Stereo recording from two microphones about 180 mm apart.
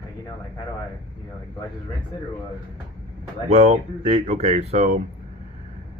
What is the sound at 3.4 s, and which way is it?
Speech, 35° right (ahead or behind).